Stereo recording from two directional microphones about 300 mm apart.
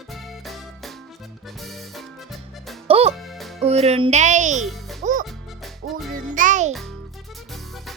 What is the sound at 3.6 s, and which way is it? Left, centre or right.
Speech, right.